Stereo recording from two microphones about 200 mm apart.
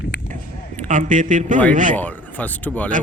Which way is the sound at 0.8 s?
40° right (ahead or behind).